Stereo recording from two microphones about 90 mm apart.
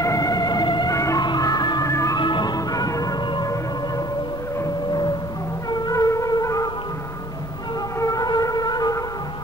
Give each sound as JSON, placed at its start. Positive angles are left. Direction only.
{"t": 0.0, "sound": "music", "side_deg": 40}
{"t": 0.9, "sound": "music", "side_deg": 35}
{"t": 1.2, "sound": "music", "side_deg": 50}
{"t": 1.9, "sound": "music", "side_deg": 35}
{"t": 2.1, "sound": "music", "side_deg": 55}
{"t": 5.7, "sound": "music", "side_deg": 45}
{"t": 8.0, "sound": "music", "side_deg": 40}